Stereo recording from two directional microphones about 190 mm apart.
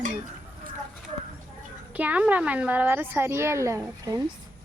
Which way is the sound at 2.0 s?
5° right (ahead or behind).